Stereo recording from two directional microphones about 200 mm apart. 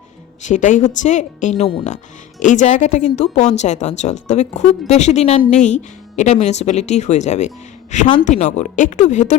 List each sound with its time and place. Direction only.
0.4 s speech: 40° left (ahead or behind)